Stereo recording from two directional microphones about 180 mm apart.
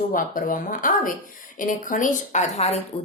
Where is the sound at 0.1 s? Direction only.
50° left (ahead or behind).